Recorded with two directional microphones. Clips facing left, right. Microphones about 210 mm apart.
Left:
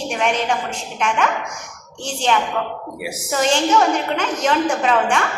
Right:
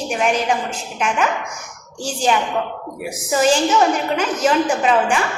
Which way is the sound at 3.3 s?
5° right (ahead or behind).